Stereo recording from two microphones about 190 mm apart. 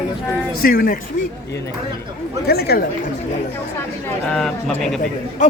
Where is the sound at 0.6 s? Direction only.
50° left (ahead or behind).